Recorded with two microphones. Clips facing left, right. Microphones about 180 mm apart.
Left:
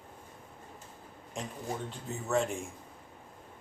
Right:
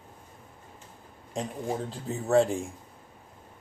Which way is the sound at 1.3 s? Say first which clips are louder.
Right 6 dB; 35° right (ahead or behind).